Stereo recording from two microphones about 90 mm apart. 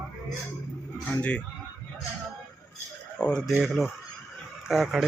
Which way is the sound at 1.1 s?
25° left (ahead or behind).